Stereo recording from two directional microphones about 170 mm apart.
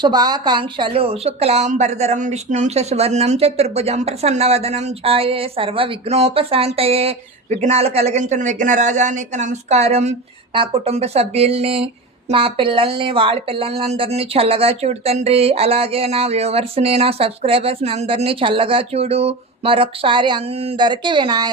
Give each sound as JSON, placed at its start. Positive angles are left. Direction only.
{"t": 0.0, "sound": "a woman's voice", "side_deg": -25}